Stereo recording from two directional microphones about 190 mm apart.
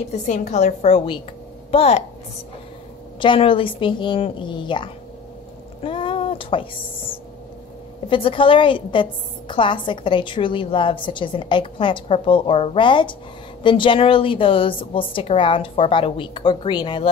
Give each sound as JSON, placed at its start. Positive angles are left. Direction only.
{"t": 0.1, "sound": "a woman's voice", "side_deg": 40}
{"t": 3.2, "sound": "a woman's voice", "side_deg": 25}
{"t": 5.8, "sound": "a sound", "side_deg": 25}
{"t": 8.1, "sound": "a woman's voice", "side_deg": 25}